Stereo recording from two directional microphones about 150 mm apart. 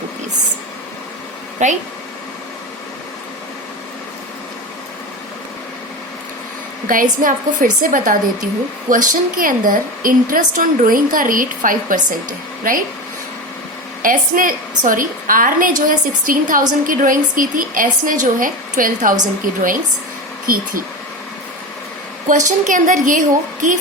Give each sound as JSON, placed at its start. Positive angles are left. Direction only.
{"t": 1.6, "sound": "speech", "side_deg": -50}
{"t": 6.8, "sound": "a woman's voice", "side_deg": -65}
{"t": 14.0, "sound": "a woman's voice", "side_deg": -65}
{"t": 22.3, "sound": "a woman's voice", "side_deg": -60}